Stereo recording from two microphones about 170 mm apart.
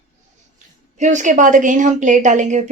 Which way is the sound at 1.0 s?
45° right (ahead or behind).